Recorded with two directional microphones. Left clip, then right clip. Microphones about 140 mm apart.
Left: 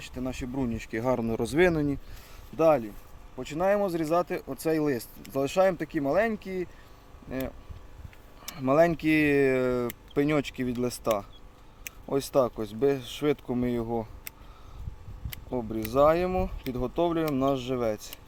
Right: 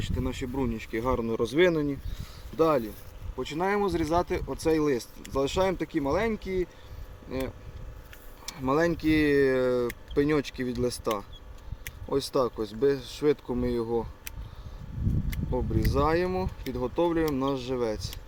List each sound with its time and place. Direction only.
0.0 s speech: 50° left (ahead or behind); by 2.0 s 90° left
2.6 s speech: 55° left (ahead or behind)
8.4 s speech: 60° left (ahead or behind)
15.9 s speech: 65° left (ahead or behind)
16.8 s speech: 70° left (ahead or behind)
17.3 s speech: 75° left (ahead or behind)